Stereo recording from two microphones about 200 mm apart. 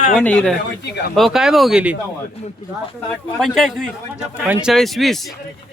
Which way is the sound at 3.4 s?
Centre (ahead or behind).